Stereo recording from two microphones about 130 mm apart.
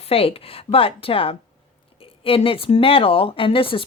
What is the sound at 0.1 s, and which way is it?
Speech, 50° left (ahead or behind).